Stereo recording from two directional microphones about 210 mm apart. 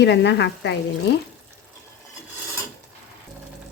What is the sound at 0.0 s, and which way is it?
A woman's voice, 55° left (ahead or behind).